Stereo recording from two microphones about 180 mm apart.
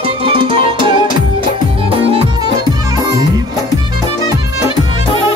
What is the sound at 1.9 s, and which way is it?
Music, 30° right (ahead or behind).